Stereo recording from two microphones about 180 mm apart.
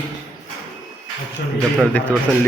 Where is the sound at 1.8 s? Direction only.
5° left (ahead or behind).